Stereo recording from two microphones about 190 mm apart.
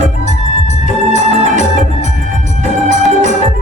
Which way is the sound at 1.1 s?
40° right (ahead or behind).